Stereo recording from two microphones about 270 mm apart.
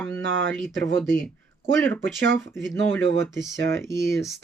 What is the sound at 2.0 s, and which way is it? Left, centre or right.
Speech, right.